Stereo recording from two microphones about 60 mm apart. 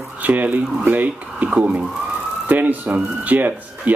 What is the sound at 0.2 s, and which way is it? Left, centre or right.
Speech, right.